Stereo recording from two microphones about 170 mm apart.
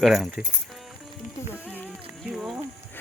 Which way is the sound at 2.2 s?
Centre (ahead or behind).